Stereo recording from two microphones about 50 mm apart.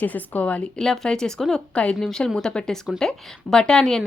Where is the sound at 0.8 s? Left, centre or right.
Centre.